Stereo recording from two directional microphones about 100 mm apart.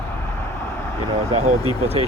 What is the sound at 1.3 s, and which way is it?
Speech, 90° right.